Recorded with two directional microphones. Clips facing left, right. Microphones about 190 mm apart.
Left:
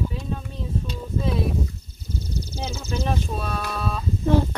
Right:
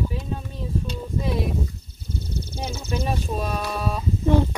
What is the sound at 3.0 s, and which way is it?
Speech, 10° right (ahead or behind).